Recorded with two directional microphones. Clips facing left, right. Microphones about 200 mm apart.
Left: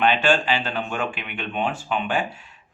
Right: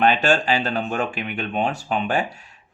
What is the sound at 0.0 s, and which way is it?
Speech, 40° right (ahead or behind).